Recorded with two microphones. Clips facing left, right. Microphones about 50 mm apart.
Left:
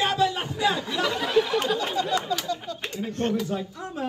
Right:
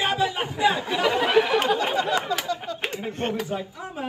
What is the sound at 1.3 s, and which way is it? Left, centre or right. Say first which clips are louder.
Speech: right 1 dB; right.